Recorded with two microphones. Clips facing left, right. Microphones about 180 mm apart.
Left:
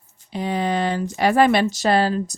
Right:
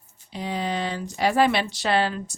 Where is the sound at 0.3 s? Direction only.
55° left (ahead or behind).